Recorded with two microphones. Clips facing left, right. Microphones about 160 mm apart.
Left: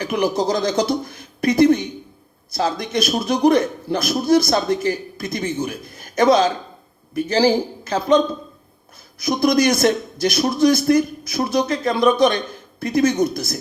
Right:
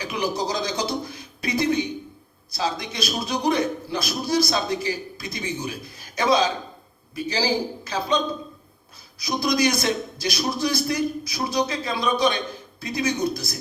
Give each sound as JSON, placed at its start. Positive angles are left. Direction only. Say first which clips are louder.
{"t": 0.0, "sound": "a man's voice", "louder": "left 6 dB", "side_deg": 55}